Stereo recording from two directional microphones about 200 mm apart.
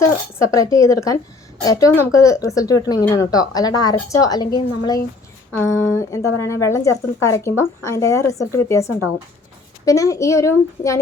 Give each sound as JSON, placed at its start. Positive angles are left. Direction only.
{"t": 0.3, "sound": "speech", "side_deg": 15}